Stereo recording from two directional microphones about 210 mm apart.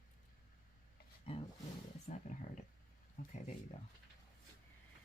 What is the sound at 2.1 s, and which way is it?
Speech, 35° left (ahead or behind).